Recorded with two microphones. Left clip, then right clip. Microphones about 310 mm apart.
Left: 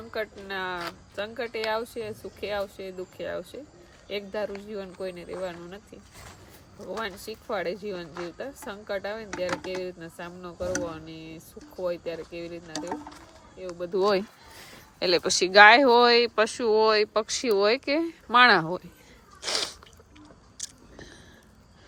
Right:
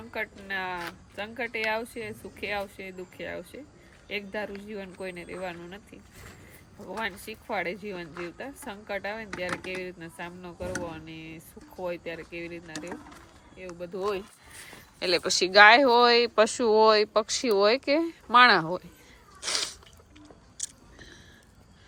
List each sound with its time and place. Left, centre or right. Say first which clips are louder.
0.4 s speech: left 1 dB; centre
7.0 s speech: right 4 dB; centre
19.4 s sneeze: left 1 dB; centre
20.6 s a sound: even; centre